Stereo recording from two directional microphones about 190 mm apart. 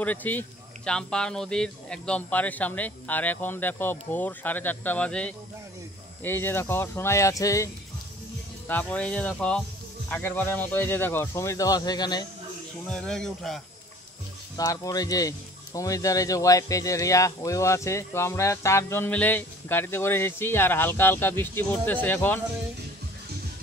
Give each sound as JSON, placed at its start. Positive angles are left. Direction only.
{"t": 0.0, "sound": "speech", "side_deg": 10}
{"t": 12.9, "sound": "speech", "side_deg": 5}
{"t": 14.6, "sound": "speech", "side_deg": 20}